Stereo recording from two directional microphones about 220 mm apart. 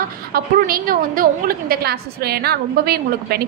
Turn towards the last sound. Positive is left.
turn(degrees=-45)  # may be behind; listen again after turning